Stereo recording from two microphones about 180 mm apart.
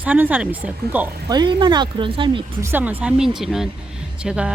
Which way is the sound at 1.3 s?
25° right (ahead or behind).